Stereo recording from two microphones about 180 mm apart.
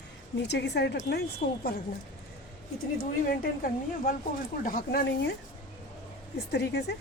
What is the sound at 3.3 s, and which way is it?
A woman's voice, 55° left (ahead or behind).